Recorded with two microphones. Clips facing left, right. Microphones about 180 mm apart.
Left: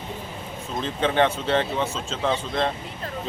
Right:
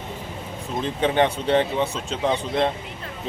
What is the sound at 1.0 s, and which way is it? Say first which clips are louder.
A man's voice: right 1 dB; 15° right (ahead or behind).